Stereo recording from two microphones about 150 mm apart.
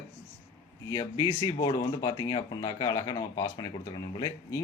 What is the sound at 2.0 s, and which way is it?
Speech, 25° left (ahead or behind).